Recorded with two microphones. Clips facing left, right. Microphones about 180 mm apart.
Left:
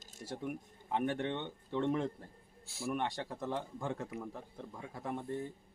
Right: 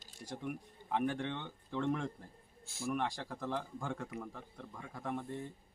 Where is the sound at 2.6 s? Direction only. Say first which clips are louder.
Even; centre (ahead or behind).